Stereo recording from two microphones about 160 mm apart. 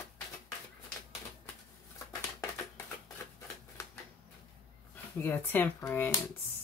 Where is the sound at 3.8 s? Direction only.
20° left (ahead or behind).